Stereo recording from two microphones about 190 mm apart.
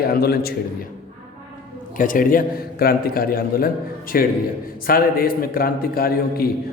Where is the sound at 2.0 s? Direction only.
45° left (ahead or behind).